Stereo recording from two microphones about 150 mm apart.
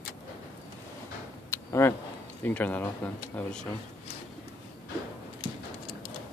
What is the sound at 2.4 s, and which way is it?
Speech, 10° left (ahead or behind).